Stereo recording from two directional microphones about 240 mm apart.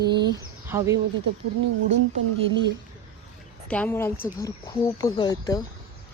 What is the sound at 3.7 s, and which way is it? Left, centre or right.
Speech, centre.